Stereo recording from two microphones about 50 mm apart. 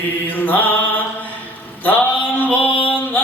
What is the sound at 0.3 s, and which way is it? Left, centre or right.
Mantra, left.